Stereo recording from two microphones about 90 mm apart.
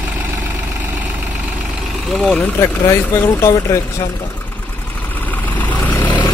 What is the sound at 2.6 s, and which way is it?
Speech, 35° left (ahead or behind).